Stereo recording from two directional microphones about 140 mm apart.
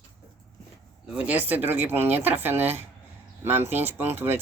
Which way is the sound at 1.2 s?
10° right (ahead or behind).